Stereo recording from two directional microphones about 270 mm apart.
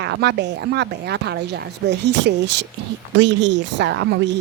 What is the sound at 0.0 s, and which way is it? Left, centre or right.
Speech, right.